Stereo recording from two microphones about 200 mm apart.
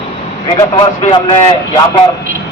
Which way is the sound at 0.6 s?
25° left (ahead or behind).